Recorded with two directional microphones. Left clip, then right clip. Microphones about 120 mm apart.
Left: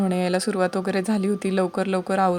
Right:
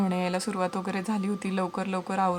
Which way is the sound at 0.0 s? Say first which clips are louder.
Left 6 dB; 35° left (ahead or behind).